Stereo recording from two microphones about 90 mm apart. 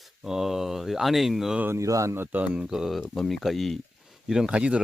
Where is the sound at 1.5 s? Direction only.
20° right (ahead or behind).